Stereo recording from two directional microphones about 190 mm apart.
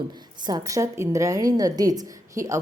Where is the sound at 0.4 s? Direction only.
20° right (ahead or behind).